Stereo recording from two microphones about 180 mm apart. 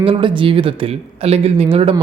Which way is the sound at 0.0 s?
30° right (ahead or behind).